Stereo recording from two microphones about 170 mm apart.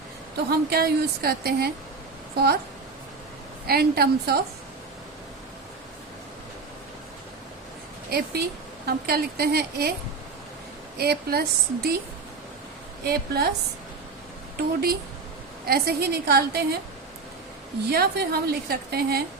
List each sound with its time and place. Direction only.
0.7 s a woman's voice: 65° right (ahead or behind)
3.7 s a woman's voice: 65° right (ahead or behind)
8.1 s a woman's voice: 70° right (ahead or behind)
10.9 s a woman's voice: 70° right (ahead or behind)
13.1 s a woman's voice: 65° right (ahead or behind)
14.5 s a woman's voice: 65° right (ahead or behind)
17.9 s a woman's voice: 65° right (ahead or behind)